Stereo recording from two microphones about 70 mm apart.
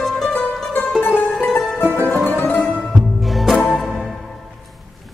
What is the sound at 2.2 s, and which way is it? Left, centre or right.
Music, left.